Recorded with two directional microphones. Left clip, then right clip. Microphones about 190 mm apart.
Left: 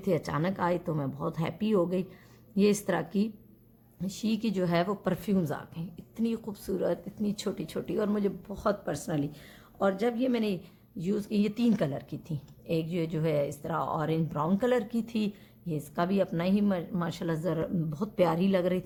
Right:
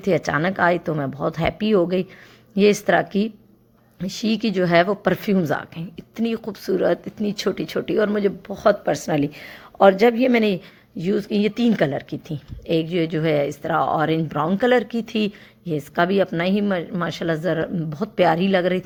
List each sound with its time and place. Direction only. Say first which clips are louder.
0.0 s speech: right 10 dB; 20° right (ahead or behind)
10.9 s speech: right 9 dB; 15° right (ahead or behind)